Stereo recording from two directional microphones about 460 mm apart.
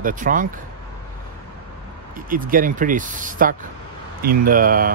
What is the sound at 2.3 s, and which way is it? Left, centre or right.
Speech, centre.